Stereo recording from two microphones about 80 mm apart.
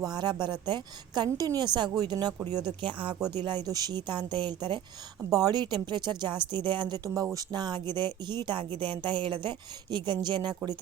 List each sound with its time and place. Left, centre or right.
0.0 s speech: right
3.3 s speech: right
5.3 s speech: right
8.8 s speech: right